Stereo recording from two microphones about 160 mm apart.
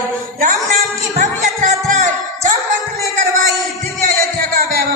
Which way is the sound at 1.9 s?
50° right (ahead or behind).